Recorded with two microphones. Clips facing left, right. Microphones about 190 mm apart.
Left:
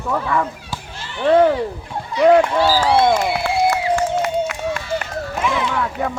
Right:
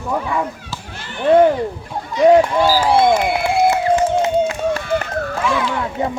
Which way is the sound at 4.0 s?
20° right (ahead or behind).